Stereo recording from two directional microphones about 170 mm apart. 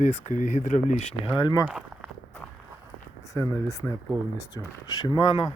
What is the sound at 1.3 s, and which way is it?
Speech, 25° left (ahead or behind).